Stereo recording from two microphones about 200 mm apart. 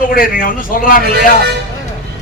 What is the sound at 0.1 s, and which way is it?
Speech, 45° left (ahead or behind).